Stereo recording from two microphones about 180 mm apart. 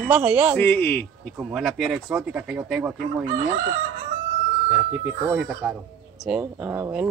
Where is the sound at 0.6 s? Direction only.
10° left (ahead or behind).